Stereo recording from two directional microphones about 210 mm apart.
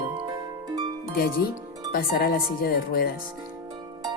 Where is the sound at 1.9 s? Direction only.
45° left (ahead or behind).